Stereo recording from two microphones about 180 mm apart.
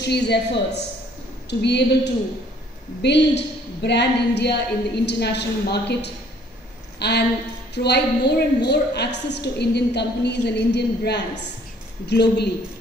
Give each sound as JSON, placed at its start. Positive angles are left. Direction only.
{"t": 0.0, "sound": "a woman's voice", "side_deg": 65}